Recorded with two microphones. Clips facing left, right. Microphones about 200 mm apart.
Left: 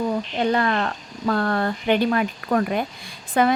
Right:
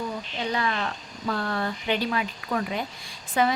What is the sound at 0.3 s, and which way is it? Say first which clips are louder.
Speech: left 6 dB; 55° left (ahead or behind).